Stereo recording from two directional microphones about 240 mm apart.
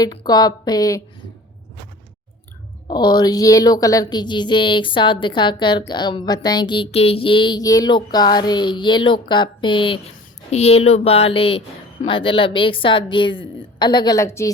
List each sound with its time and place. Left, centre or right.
0.0 s a woman's voice: centre
2.8 s a woman's voice: centre